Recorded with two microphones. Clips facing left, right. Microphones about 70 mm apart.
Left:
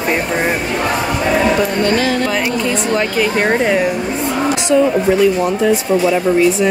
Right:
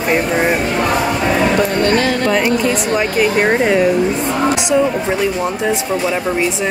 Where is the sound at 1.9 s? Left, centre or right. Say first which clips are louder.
Right 1 dB; right.